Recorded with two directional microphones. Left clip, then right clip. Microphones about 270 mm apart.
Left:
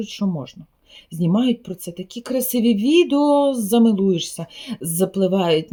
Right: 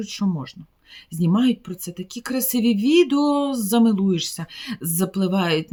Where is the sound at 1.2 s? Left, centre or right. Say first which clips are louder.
Left 1 dB; right.